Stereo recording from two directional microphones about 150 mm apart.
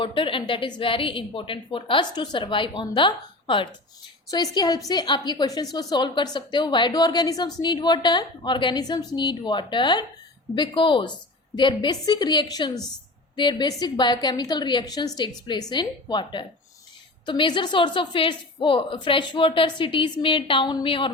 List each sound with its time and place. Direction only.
0.0 s a woman's voice: 35° left (ahead or behind)